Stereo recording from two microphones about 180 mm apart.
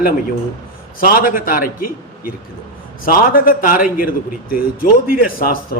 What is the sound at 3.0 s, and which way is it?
A man's voice, 55° left (ahead or behind).